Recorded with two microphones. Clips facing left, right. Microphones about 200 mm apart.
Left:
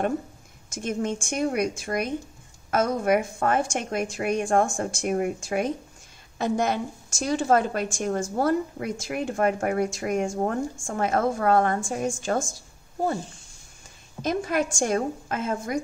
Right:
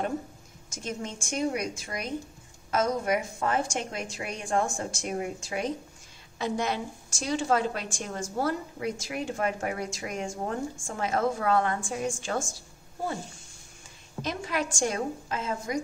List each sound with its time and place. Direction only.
0.7 s a woman's voice: 55° left (ahead or behind)
14.2 s speech: 45° left (ahead or behind)